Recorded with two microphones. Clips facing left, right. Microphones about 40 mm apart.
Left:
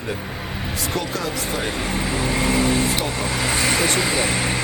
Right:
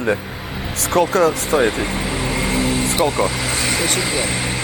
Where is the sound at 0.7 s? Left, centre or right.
Right.